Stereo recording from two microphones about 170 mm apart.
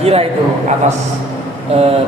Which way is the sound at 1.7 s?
35° right (ahead or behind).